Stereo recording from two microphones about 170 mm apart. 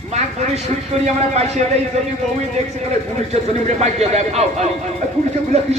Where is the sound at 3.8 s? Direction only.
40° right (ahead or behind).